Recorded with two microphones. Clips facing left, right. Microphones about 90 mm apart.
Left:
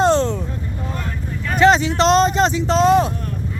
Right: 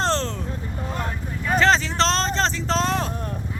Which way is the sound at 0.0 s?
5° left (ahead or behind).